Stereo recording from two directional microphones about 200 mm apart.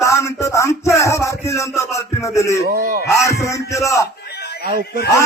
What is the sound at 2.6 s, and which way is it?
Speech, 50° right (ahead or behind).